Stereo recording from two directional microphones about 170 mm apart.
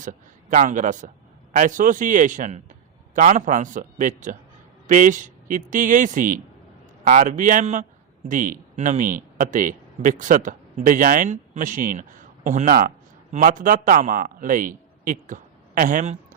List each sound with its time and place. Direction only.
0.0 s a man's voice: 50° right (ahead or behind)